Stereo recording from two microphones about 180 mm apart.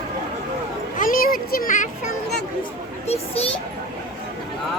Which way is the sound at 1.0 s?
50° left (ahead or behind).